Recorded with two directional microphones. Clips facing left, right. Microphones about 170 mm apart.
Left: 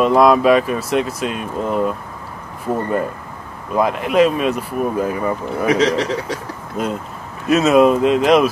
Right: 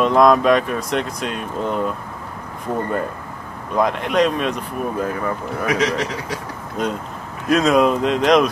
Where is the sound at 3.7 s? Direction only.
5° left (ahead or behind).